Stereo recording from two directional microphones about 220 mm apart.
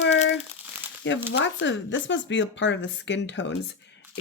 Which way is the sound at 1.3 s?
55° left (ahead or behind).